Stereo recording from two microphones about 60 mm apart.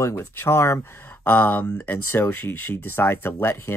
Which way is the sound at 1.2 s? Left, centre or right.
Left.